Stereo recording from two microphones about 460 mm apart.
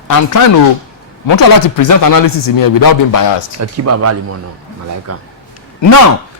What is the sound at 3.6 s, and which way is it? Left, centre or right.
Speech, right.